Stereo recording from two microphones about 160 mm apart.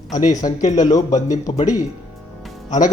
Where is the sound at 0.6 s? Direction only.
50° left (ahead or behind).